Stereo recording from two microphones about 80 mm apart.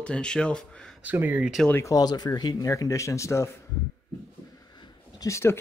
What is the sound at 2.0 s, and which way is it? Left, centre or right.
Speech, left.